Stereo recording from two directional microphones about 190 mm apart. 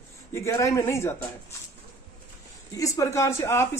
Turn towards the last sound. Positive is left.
turn(degrees=15)  # may be behind; listen again after turning